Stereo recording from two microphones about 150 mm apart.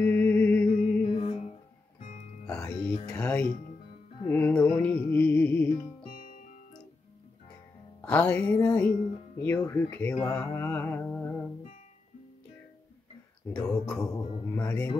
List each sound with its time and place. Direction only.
0.0 s music: 10° left (ahead or behind)
1.1 s music: 40° left (ahead or behind)
2.5 s music: 10° left (ahead or behind)
2.9 s music: 30° left (ahead or behind)
3.2 s music: 10° left (ahead or behind)
6.0 s music: 65° left (ahead or behind)
8.0 s music: 10° left (ahead or behind)
13.5 s music: 5° left (ahead or behind)